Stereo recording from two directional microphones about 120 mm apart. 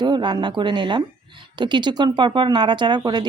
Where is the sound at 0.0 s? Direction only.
40° right (ahead or behind).